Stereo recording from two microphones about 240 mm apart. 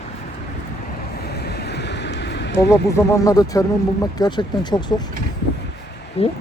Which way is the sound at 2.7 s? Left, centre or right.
Centre.